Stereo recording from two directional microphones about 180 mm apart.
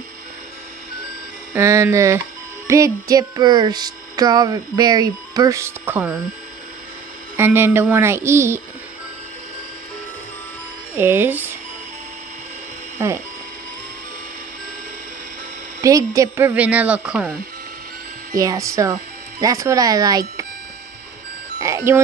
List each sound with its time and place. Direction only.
1.5 s speech: 15° right (ahead or behind)
2.7 s a sound: 20° right (ahead or behind)
7.3 s speech: 10° right (ahead or behind)
11.0 s speech: 10° right (ahead or behind)
15.8 s speech: 20° right (ahead or behind)
18.3 s a sound: 20° right (ahead or behind)
21.5 s reversing beeps: 20° right (ahead or behind)